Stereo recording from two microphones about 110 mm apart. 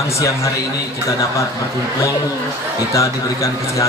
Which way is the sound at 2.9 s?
30° left (ahead or behind).